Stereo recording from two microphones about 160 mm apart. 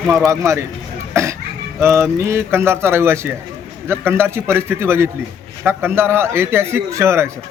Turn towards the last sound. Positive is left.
turn(degrees=-15)  # may be behind; listen again after turning